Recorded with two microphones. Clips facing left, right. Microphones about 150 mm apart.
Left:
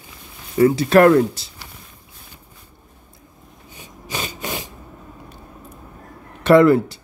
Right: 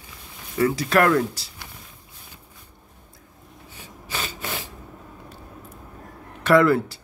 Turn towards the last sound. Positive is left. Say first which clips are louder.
# left 5 dB
turn(degrees=20)  # may be behind; listen again after turning